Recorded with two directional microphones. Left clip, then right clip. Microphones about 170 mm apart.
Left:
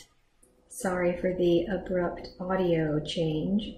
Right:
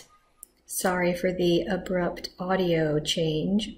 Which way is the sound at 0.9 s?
15° right (ahead or behind).